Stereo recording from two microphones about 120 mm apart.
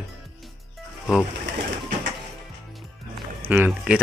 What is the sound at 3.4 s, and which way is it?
Speech, 15° right (ahead or behind).